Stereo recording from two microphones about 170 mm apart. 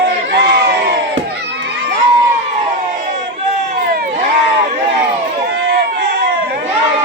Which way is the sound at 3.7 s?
60° right (ahead or behind).